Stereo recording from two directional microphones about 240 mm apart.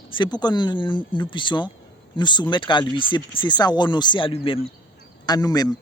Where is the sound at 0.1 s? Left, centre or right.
Centre.